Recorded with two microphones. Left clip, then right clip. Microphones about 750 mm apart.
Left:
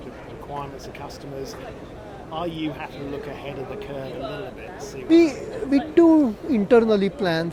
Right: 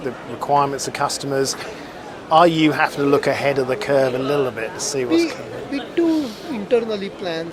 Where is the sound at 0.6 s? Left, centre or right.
Right.